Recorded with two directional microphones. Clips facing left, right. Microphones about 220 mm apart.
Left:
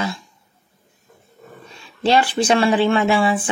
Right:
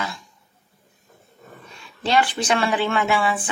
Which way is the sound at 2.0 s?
30° left (ahead or behind).